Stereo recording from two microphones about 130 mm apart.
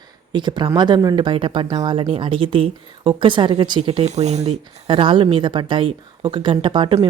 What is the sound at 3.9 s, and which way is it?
Speech, 55° right (ahead or behind).